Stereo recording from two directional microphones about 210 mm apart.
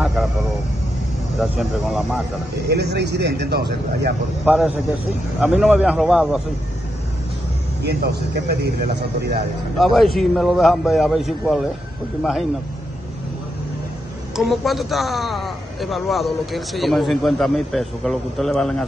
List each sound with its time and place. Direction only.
0.0 s vehicle: 5° right (ahead or behind)
1.4 s a man's voice: centre (ahead or behind)
2.7 s speech: 50° right (ahead or behind)
4.5 s a man's voice: 5° right (ahead or behind)
7.8 s speech: 50° right (ahead or behind)
9.8 s a man's voice: centre (ahead or behind)
14.3 s a man's voice: centre (ahead or behind)